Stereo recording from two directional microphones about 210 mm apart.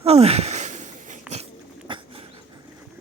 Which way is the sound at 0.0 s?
30° right (ahead or behind).